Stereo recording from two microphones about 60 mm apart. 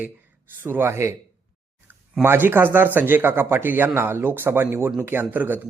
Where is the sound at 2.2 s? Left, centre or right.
Right.